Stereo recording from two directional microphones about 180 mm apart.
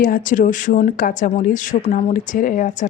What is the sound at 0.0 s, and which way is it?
Speech, 50° left (ahead or behind).